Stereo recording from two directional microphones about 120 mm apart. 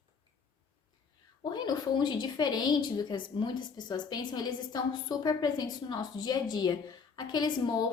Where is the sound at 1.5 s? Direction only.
40° left (ahead or behind).